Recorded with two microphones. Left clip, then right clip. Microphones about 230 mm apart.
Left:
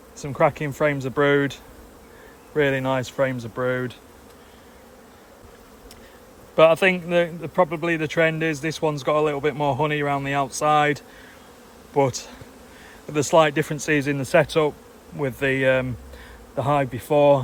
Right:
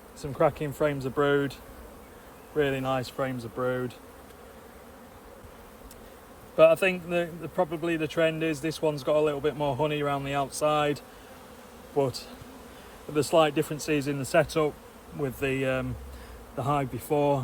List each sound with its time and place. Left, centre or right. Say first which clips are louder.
0.2 s a man's voice: left 5 dB; left
2.6 s a man's voice: left 6 dB; left
6.6 s a man's voice: left 4 dB; left
12.0 s a man's voice: left 6 dB; left